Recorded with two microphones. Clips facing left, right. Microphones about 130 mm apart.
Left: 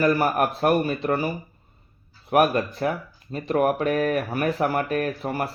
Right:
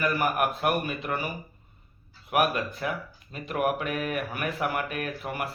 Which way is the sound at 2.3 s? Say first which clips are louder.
Left 6 dB; 35° left (ahead or behind).